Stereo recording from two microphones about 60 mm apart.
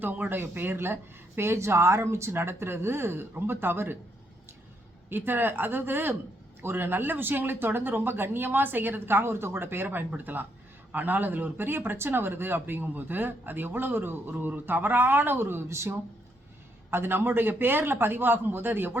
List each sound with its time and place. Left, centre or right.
0.0 s speech: right
5.0 s speech: right